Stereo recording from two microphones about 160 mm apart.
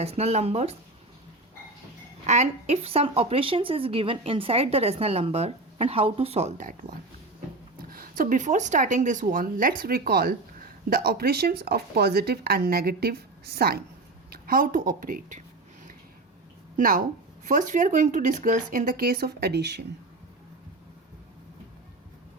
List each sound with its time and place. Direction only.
0.0 s speech: 40° right (ahead or behind)
2.2 s speech: 45° right (ahead or behind)
7.8 s speech: 65° right (ahead or behind)
16.7 s speech: 60° right (ahead or behind); by 19.8 s 90° right